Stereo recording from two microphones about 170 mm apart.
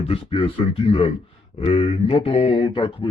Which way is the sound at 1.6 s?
35° left (ahead or behind).